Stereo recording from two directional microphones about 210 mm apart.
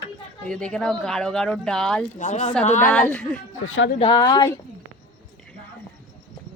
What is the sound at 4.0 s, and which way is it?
Speech, 20° left (ahead or behind).